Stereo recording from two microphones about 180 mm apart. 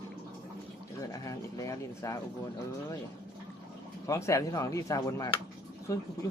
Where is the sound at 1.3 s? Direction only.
20° left (ahead or behind).